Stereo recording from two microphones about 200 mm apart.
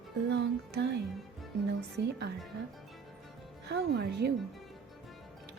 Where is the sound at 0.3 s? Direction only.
60° right (ahead or behind).